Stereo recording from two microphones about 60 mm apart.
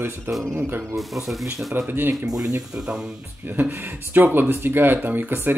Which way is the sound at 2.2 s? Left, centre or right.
Right.